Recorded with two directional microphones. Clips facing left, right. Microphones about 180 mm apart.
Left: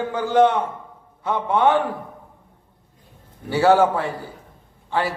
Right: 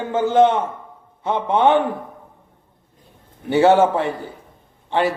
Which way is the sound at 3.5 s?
20° right (ahead or behind).